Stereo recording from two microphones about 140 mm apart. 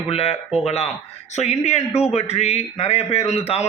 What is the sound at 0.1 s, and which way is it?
A man's voice, 45° left (ahead or behind).